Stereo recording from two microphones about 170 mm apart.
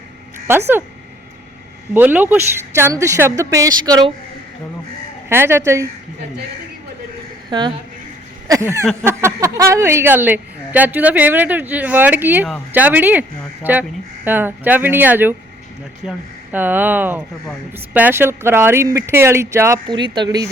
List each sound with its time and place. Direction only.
0.3 s a sound: 15° right (ahead or behind)
1.9 s a woman's voice: 10° right (ahead or behind)
5.3 s a woman's voice: 15° right (ahead or behind)
8.4 s a woman's voice: 15° right (ahead or behind)
19.9 s a woman's voice: 25° right (ahead or behind)